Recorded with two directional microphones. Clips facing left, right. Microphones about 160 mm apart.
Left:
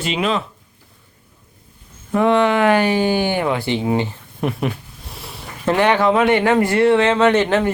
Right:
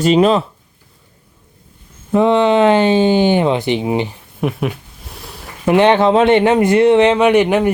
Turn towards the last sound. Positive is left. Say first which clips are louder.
# right 3 dB
turn(degrees=-15)  # may be behind; listen again after turning